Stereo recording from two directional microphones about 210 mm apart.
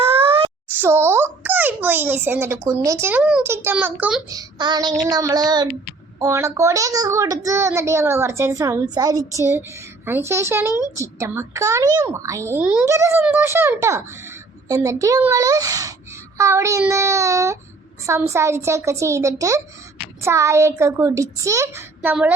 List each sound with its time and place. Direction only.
0.0 s wail: 25° right (ahead or behind)
0.7 s a child's voice: 10° right (ahead or behind)
4.3 s child singing: 20° right (ahead or behind)
6.1 s a child's voice: 15° right (ahead or behind)